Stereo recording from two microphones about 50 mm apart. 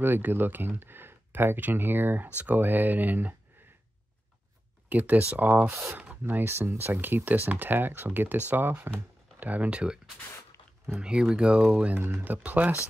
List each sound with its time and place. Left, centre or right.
0.0 s speech: right
2.2 s speech: right
4.8 s speech: right
5.7 s speech: right
6.4 s speech: right
9.4 s speech: right
10.9 s speech: centre
12.1 s speech: right